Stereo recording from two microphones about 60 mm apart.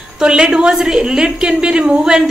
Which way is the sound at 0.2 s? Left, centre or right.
Centre.